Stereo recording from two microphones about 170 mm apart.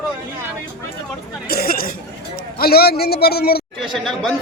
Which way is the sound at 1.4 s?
60° left (ahead or behind).